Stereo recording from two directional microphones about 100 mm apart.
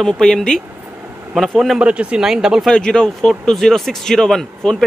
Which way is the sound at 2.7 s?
10° left (ahead or behind).